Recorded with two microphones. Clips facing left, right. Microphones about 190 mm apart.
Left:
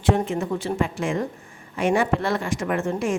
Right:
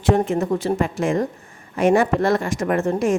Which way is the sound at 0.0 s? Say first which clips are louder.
Right 4 dB; 40° right (ahead or behind).